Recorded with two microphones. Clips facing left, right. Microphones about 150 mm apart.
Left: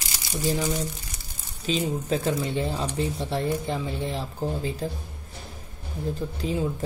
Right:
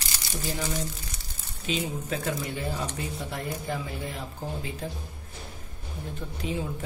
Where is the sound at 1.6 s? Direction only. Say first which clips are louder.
Left 5 dB; 35° left (ahead or behind).